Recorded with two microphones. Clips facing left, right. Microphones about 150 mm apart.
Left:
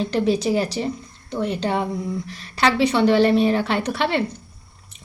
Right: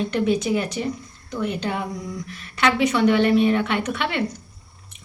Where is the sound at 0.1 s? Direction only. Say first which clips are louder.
Left 3 dB; 30° left (ahead or behind).